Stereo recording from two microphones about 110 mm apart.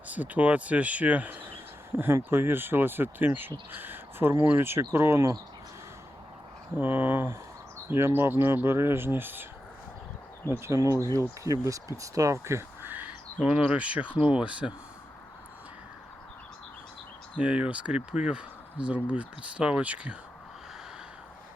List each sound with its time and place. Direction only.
0.1 s speech: 15° right (ahead or behind)
6.7 s speech: 15° right (ahead or behind)
10.5 s speech: 25° right (ahead or behind)
17.3 s speech: 10° right (ahead or behind)